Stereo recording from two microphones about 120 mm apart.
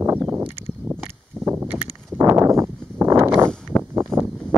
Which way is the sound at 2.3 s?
25° right (ahead or behind).